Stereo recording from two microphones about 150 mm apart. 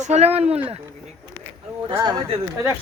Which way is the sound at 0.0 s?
45° right (ahead or behind).